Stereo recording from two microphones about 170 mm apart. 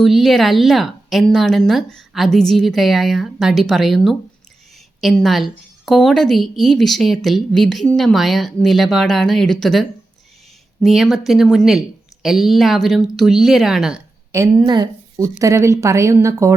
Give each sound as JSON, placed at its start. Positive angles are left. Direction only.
{"t": 0.0, "sound": "a woman's voice", "side_deg": 0}
{"t": 14.3, "sound": "a woman's voice", "side_deg": -20}